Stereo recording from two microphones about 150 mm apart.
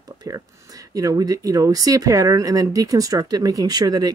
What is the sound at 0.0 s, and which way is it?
Speech, 25° right (ahead or behind).